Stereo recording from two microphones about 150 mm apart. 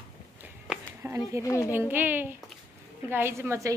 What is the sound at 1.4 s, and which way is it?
Speech, 20° left (ahead or behind).